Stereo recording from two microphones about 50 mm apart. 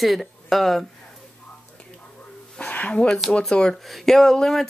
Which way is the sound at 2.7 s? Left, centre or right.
Left.